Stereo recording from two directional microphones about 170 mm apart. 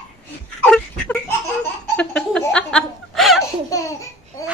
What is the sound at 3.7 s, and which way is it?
Laughter, 20° left (ahead or behind).